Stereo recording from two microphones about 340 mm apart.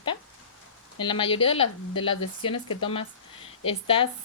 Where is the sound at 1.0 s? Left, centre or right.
Centre.